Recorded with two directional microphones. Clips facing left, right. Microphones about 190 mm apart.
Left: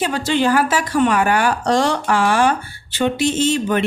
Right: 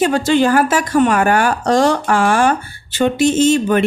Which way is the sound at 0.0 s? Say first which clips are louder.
Right 5 dB; 45° right (ahead or behind).